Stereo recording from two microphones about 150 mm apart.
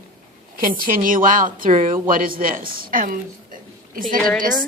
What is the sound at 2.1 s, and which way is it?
A woman's voice, 70° right (ahead or behind).